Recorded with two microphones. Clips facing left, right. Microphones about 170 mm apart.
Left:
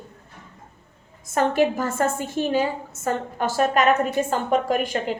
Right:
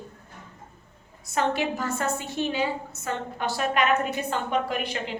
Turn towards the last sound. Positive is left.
turn(degrees=45)  # may be behind; listen again after turning